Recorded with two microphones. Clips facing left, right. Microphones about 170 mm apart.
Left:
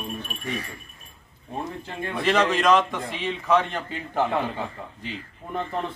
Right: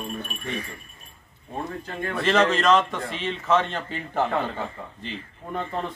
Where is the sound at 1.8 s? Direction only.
15° left (ahead or behind).